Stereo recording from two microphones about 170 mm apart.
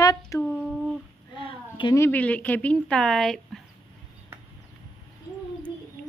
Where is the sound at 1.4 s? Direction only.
30° left (ahead or behind).